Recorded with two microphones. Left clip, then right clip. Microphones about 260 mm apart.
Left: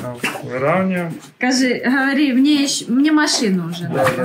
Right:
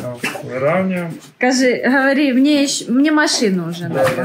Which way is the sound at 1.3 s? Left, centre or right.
Centre.